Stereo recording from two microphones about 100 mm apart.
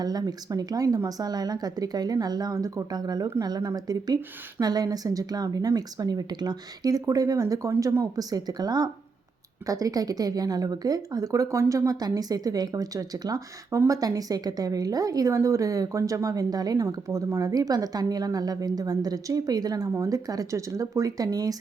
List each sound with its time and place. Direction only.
0.0 s a woman's voice: 40° right (ahead or behind)